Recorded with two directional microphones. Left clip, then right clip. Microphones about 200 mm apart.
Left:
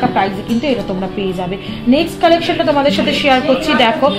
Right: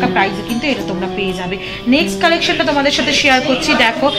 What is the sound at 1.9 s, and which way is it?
A woman's voice, 45° left (ahead or behind).